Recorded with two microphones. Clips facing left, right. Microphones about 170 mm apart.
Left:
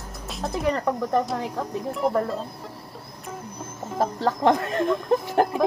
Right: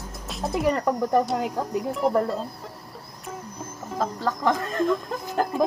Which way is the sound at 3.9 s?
25° left (ahead or behind).